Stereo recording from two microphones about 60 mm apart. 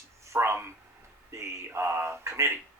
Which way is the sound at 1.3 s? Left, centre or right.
Right.